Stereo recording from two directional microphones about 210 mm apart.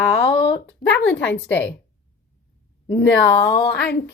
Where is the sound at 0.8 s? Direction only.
60° left (ahead or behind).